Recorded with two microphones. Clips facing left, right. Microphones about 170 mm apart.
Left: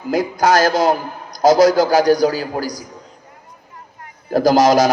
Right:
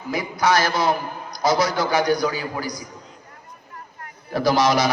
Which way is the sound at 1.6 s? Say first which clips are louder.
Left 10 dB; 90° left.